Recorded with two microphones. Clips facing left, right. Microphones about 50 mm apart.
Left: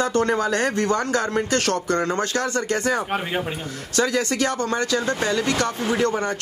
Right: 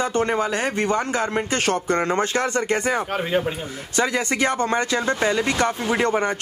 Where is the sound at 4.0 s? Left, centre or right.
Right.